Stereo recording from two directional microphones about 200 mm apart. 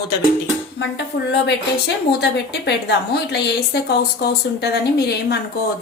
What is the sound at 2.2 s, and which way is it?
A woman's voice, 55° left (ahead or behind).